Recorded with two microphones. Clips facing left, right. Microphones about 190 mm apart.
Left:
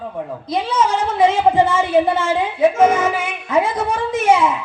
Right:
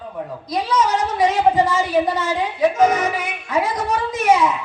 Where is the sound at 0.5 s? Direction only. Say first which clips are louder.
Left 1 dB; 25° left (ahead or behind).